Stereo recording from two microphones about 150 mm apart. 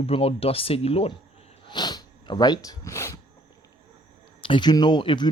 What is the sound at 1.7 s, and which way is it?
Snort, 30° left (ahead or behind).